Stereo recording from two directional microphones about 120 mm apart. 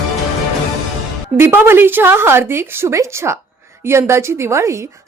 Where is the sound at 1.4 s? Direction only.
20° right (ahead or behind).